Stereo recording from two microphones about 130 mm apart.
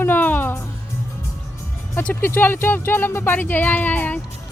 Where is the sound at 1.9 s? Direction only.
15° left (ahead or behind).